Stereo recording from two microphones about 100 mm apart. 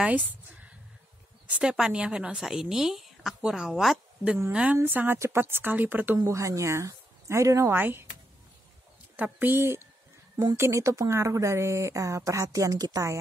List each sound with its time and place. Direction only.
0.0 s a woman's voice: 15° right (ahead or behind)
6.1 s speech: 30° right (ahead or behind)
9.1 s speech: 15° right (ahead or behind); by 13.2 s 35° right (ahead or behind)